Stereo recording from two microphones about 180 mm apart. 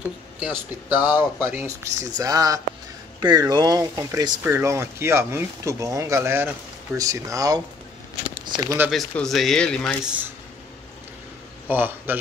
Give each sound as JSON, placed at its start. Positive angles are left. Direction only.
{"t": 0.4, "sound": "speech", "side_deg": -10}
{"t": 8.9, "sound": "speech", "side_deg": 0}
{"t": 11.6, "sound": "a man's voice", "side_deg": -10}